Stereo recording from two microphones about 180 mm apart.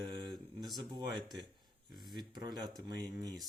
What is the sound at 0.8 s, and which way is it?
Speech, 25° right (ahead or behind).